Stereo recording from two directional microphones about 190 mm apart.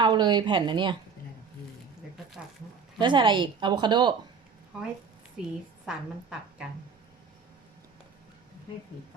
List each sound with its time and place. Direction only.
0.0 s a woman's voice: 25° right (ahead or behind)
3.0 s a woman's voice: 25° right (ahead or behind)
4.7 s a woman's voice: 5° right (ahead or behind)